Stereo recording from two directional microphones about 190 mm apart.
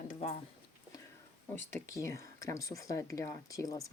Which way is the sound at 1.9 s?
15° left (ahead or behind).